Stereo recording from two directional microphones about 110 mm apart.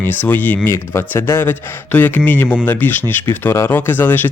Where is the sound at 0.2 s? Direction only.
15° left (ahead or behind).